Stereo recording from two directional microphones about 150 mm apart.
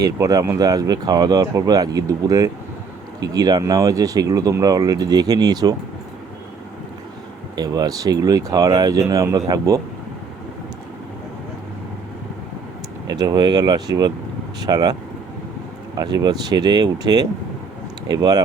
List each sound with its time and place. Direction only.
0.0 s speech: 25° right (ahead or behind)
7.5 s speech: 25° right (ahead or behind)
13.1 s speech: 25° right (ahead or behind)
16.0 s speech: 25° right (ahead or behind)